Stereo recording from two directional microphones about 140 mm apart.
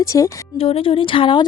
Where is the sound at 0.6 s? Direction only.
40° left (ahead or behind).